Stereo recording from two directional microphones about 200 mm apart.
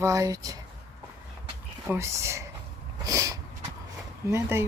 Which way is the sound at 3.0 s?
15° right (ahead or behind).